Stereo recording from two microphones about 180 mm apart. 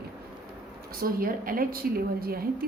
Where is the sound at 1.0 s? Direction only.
55° right (ahead or behind).